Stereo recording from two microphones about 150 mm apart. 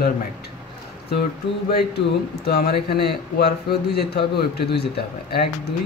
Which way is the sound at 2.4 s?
90° left.